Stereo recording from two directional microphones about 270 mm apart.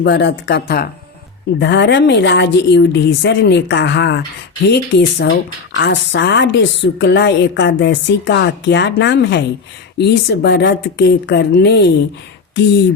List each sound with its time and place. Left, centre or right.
0.0 s a woman's voice: left